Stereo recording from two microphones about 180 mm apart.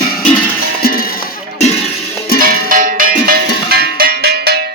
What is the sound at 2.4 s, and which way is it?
Cowbell, 50° right (ahead or behind).